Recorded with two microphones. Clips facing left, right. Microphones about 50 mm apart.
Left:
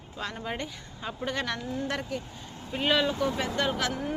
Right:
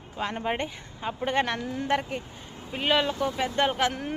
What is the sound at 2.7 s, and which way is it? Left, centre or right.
Speech, centre.